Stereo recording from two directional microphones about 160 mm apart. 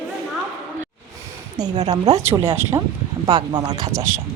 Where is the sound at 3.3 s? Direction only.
25° right (ahead or behind).